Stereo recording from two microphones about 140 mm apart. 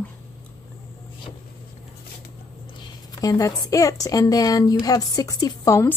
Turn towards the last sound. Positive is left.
turn(degrees=25)  # may be behind; listen again after turning